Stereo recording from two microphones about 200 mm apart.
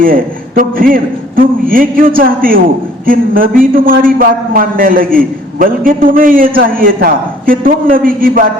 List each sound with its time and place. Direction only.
0.0 s a man's voice: 45° right (ahead or behind)